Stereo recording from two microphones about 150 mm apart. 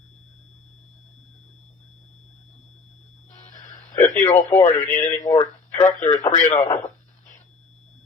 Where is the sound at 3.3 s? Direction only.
55° left (ahead or behind).